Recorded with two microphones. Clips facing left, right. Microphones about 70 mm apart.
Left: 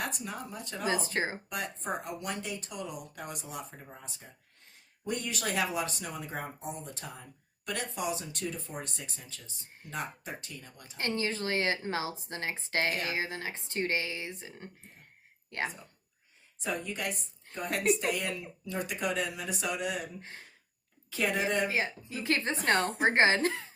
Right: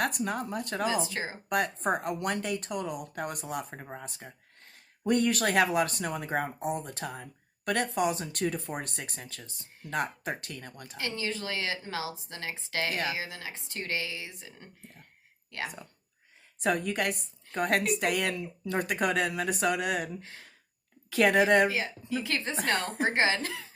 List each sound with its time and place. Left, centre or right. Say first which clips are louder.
0.0 s speech: right 7 dB; right
0.9 s speech: left 5 dB; left
1.5 s speech: right 7 dB; right
10.9 s speech: left 2 dB; left
16.6 s speech: right 7 dB; right
21.1 s a woman's voice: right 8 dB; right
21.7 s speech: right 1 dB; left